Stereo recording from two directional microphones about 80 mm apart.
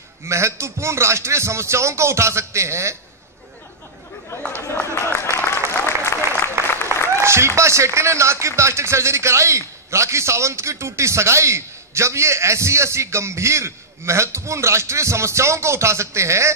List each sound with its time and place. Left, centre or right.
0.3 s speech: right
4.4 s speech: centre
5.0 s a sound: left
5.7 s applause: left
7.2 s speech: right